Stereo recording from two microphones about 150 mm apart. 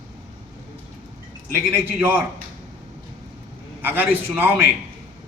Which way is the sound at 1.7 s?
15° right (ahead or behind).